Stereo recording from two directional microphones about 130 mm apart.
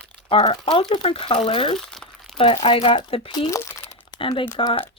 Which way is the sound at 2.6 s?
45° left (ahead or behind).